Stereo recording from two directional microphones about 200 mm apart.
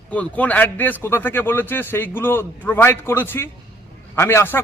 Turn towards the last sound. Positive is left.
turn(degrees=10)  # may be behind; listen again after turning